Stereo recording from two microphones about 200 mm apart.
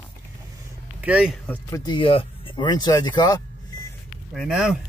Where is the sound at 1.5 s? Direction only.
15° left (ahead or behind).